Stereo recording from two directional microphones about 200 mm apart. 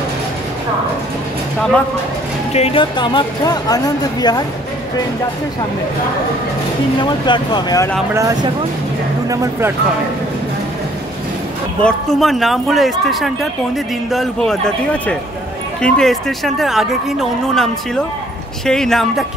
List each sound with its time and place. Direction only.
2.5 s speech: 30° left (ahead or behind)
7.0 s speech: 25° left (ahead or behind)
8.1 s speech: 15° right (ahead or behind)
11.8 s speech: centre (ahead or behind)
18.7 s speech: centre (ahead or behind)